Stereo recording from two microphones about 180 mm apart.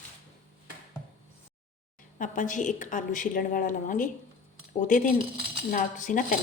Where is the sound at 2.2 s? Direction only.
45° left (ahead or behind).